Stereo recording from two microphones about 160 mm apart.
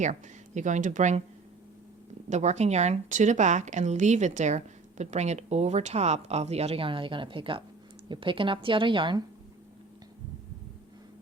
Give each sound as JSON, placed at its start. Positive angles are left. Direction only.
{"t": 0.0, "sound": "speech", "side_deg": -50}
{"t": 2.3, "sound": "a woman's voice", "side_deg": -45}